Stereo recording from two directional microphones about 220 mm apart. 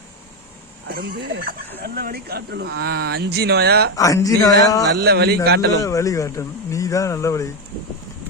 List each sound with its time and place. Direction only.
0.9 s speech: 45° right (ahead or behind)
1.4 s speech: 40° right (ahead or behind)
3.9 s speech: 15° left (ahead or behind)
4.9 s speech: 45° right (ahead or behind)
5.8 s speech: 15° left (ahead or behind)